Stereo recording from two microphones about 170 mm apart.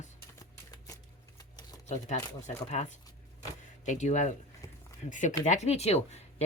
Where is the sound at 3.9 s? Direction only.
45° left (ahead or behind).